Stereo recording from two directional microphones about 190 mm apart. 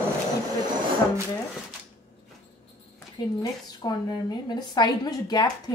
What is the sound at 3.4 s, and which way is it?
A woman's voice, 20° left (ahead or behind).